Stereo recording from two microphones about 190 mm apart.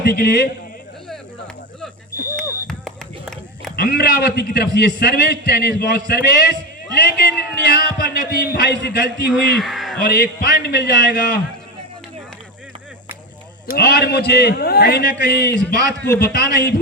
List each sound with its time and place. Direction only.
0.0 s a man's voice: 60° left (ahead or behind)
2.3 s a sound: 5° left (ahead or behind)
3.8 s a man's voice: 55° left (ahead or behind)
9.6 s a man's voice: centre (ahead or behind)
10.0 s a man's voice: 55° left (ahead or behind)
13.7 s a man's voice: 55° left (ahead or behind)